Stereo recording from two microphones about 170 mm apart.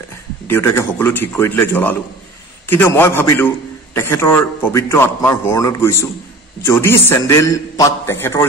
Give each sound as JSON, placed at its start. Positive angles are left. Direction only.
{"t": 0.5, "sound": "a man's voice", "side_deg": 15}